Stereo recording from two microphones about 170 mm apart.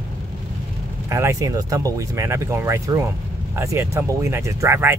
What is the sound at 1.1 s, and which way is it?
Speech, 15° right (ahead or behind).